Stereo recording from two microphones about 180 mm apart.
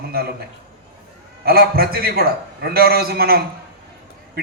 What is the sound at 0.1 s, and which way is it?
Speech, 60° right (ahead or behind).